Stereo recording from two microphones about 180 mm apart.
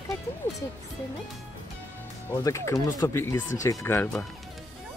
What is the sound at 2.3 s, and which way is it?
Speech, 20° left (ahead or behind).